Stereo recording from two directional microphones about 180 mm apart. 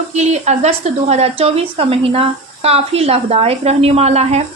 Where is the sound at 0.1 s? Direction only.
40° right (ahead or behind).